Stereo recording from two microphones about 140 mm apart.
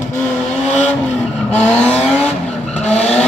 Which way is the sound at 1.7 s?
10° left (ahead or behind).